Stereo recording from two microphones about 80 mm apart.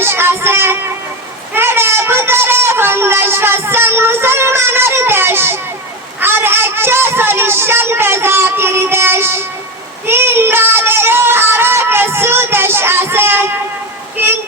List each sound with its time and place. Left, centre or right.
0.0 s speech: right
1.5 s a sound: right
6.1 s speech: right
10.1 s synthetic singing: right